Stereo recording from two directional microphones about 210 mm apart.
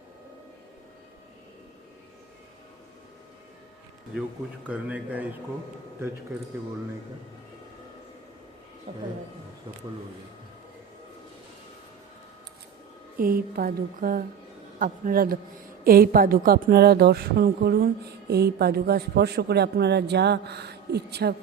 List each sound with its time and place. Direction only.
4.6 s speech: 5° right (ahead or behind)
8.9 s speech: 30° right (ahead or behind)
13.1 s speech: 45° right (ahead or behind)